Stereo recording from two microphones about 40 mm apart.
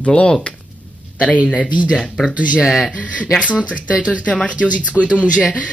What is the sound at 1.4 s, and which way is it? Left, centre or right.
Speech, left.